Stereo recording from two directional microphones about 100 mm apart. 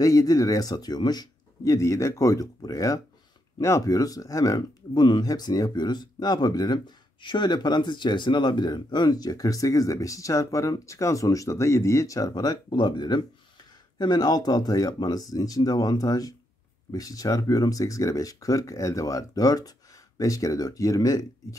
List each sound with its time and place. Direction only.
0.0 s speech: 35° left (ahead or behind)